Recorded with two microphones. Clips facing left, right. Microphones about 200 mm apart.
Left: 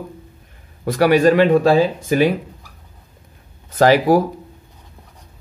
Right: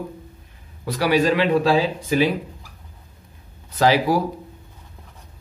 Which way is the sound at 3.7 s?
50° left (ahead or behind).